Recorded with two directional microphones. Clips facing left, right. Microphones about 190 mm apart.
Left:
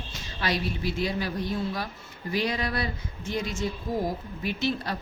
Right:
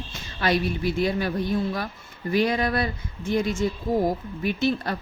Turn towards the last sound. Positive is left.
turn(degrees=-50)  # may be behind; listen again after turning